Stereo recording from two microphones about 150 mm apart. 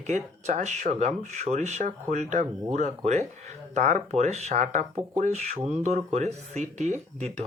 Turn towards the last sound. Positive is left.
turn(degrees=-50)  # may be behind; listen again after turning